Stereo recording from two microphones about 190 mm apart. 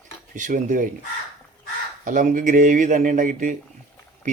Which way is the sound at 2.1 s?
45° right (ahead or behind).